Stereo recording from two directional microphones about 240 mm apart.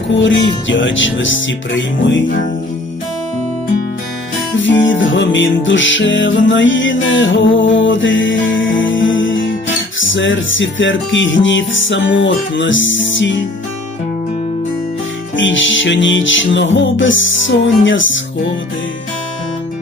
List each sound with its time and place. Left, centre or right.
0.1 s music: left
4.6 s music: left
15.4 s music: left